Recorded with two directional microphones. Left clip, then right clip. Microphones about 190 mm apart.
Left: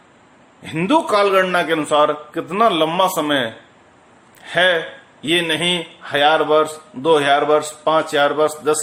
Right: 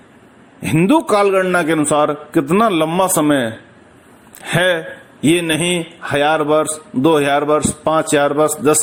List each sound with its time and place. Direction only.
0.6 s a man's voice: 35° right (ahead or behind)